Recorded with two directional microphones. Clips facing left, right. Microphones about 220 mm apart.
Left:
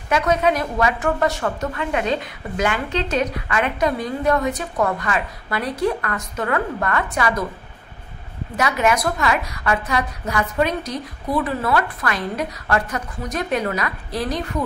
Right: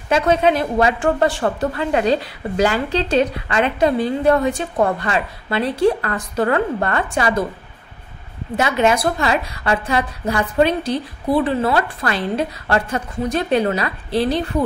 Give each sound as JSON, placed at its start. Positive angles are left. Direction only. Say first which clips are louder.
{"t": 0.1, "sound": "a woman's voice", "louder": "right 3 dB", "side_deg": -25}
{"t": 8.5, "sound": "a woman's voice", "louder": "right 3 dB", "side_deg": -25}